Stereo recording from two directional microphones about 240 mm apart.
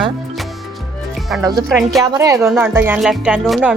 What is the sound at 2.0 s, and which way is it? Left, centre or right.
Speech, centre.